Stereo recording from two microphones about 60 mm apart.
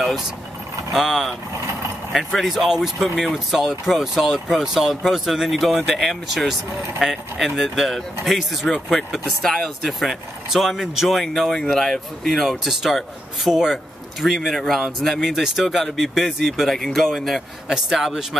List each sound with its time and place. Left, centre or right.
0.0 s speech: centre
1.5 s vehicle: right
2.1 s speech: centre
9.3 s speech: centre